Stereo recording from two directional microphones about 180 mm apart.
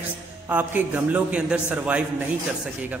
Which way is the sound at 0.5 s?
10° right (ahead or behind).